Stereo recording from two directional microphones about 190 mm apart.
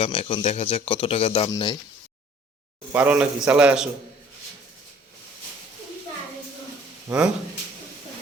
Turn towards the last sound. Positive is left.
turn(degrees=-5)  # may be behind; listen again after turning